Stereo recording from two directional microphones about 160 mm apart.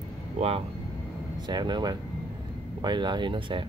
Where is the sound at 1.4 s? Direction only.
25° right (ahead or behind).